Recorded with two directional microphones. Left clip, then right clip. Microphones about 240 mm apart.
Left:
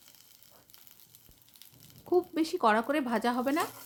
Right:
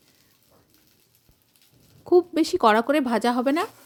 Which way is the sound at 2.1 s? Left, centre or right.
Right.